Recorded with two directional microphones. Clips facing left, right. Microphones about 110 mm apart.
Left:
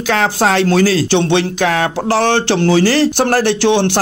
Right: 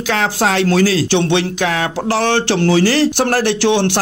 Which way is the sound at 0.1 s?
40° left (ahead or behind).